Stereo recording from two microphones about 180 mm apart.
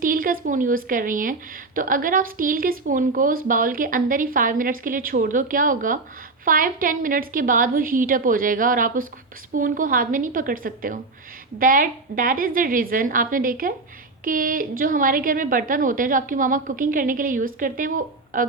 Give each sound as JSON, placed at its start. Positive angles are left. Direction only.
{"t": 0.0, "sound": "speech", "side_deg": -50}